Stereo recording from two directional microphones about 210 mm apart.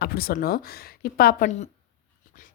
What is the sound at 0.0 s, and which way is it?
A woman's voice, 45° left (ahead or behind).